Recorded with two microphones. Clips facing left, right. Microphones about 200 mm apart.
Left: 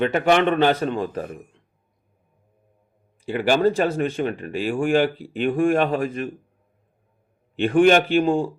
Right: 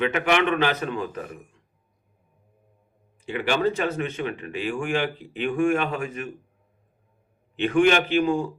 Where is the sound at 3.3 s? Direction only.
40° left (ahead or behind).